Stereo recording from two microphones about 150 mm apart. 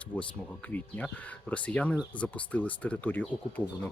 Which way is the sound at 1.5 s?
10° left (ahead or behind).